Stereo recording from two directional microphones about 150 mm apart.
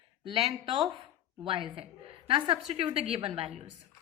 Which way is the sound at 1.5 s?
35° right (ahead or behind).